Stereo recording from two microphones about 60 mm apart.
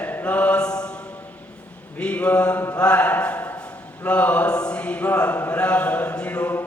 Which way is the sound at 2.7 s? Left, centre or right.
Centre.